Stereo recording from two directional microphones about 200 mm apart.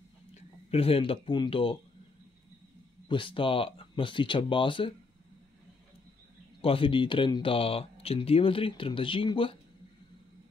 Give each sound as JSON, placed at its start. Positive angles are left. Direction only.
{"t": 0.3, "sound": "speech", "side_deg": 30}
{"t": 3.1, "sound": "speech", "side_deg": 25}
{"t": 6.6, "sound": "speech", "side_deg": 25}